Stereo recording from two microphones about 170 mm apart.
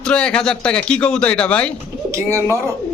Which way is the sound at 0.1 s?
5° left (ahead or behind).